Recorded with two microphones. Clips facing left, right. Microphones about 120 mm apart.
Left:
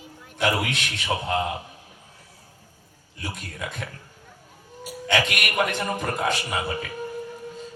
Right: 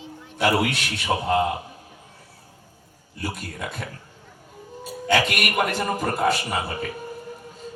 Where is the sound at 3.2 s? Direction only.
5° right (ahead or behind).